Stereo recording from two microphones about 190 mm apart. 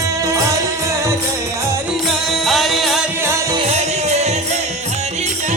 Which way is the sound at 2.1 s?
Centre (ahead or behind).